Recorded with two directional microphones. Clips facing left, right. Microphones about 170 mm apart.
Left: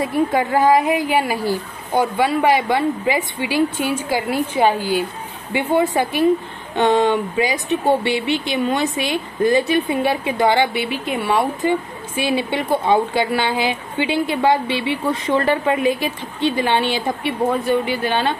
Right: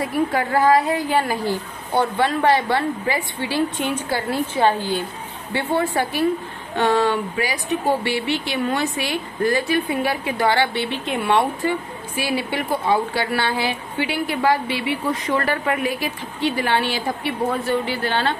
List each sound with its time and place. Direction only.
0.0 s a woman's voice: 20° left (ahead or behind); by 11.4 s centre (ahead or behind)
11.6 s a woman's voice: 20° left (ahead or behind)